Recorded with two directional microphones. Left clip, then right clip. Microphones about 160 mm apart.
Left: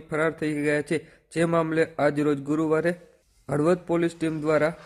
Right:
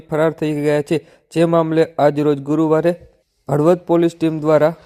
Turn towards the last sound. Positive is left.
turn(degrees=-25)  # may be behind; listen again after turning